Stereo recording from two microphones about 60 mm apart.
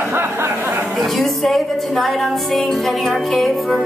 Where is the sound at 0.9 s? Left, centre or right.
Centre.